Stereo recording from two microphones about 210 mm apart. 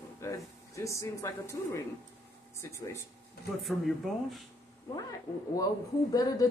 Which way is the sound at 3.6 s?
Centre (ahead or behind).